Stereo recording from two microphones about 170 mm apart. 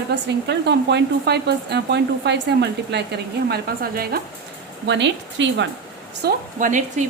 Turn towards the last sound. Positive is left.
turn(degrees=-50)  # may be behind; listen again after turning